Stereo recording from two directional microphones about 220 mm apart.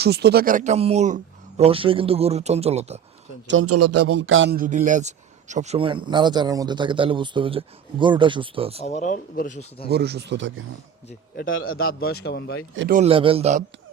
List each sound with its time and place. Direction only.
0.0 s speech: 50° right (ahead or behind); by 3.0 s 30° right (ahead or behind)
3.4 s a man's voice: 65° right (ahead or behind)
4.5 s speech: 40° right (ahead or behind)
8.8 s speech: 30° left (ahead or behind)
9.9 s speech: 50° right (ahead or behind)
11.4 s a man's voice: 65° left (ahead or behind)
11.8 s speech: 45° left (ahead or behind)
12.9 s speech: 30° right (ahead or behind)